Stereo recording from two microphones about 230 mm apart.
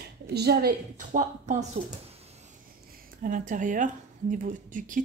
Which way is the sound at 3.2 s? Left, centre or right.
Right.